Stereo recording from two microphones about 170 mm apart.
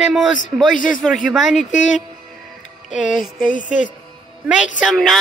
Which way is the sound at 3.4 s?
50° left (ahead or behind).